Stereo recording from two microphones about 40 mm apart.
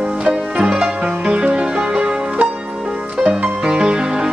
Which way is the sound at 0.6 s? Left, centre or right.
Right.